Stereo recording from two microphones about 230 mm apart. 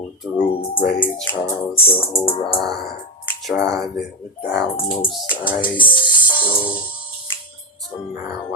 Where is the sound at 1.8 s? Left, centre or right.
Left.